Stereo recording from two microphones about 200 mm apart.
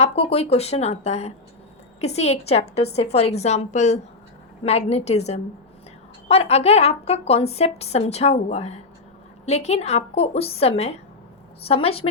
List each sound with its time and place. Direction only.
0.0 s a woman's voice: 30° left (ahead or behind)